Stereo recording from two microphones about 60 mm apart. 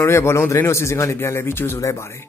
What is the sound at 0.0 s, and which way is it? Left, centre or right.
Speech, left.